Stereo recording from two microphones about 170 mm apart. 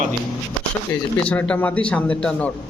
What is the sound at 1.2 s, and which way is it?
A man's voice, 10° left (ahead or behind).